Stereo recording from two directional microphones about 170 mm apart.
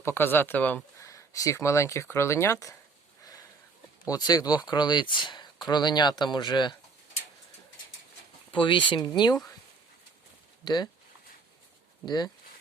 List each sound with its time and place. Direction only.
0.0 s speech: 15° left (ahead or behind)
4.1 s speech: 20° left (ahead or behind)
8.5 s speech: 30° left (ahead or behind)
10.6 s speech: 25° left (ahead or behind)
12.0 s speech: 25° left (ahead or behind)